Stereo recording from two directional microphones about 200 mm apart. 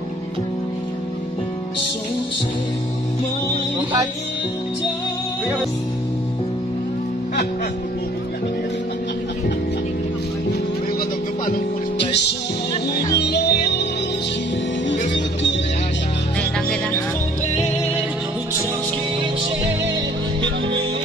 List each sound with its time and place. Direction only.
13.1 s music: 55° left (ahead or behind)